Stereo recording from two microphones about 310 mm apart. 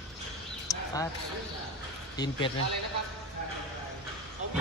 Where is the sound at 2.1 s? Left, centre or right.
Centre.